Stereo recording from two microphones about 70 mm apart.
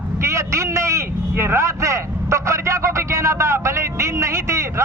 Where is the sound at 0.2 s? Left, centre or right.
Right.